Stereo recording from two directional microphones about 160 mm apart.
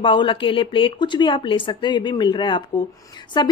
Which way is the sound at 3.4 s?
25° left (ahead or behind).